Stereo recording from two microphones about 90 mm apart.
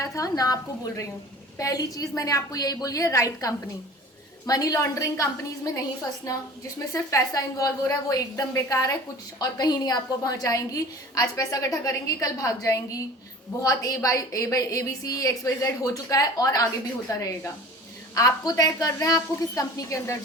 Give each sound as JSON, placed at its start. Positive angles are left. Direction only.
{"t": 0.0, "sound": "a woman's voice", "side_deg": 40}
{"t": 6.9, "sound": "a woman's voice", "side_deg": 40}